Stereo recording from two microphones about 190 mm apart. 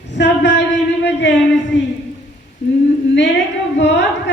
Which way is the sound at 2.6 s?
65° left (ahead or behind).